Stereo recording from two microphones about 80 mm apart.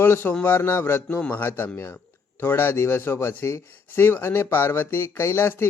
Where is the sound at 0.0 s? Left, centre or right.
Left.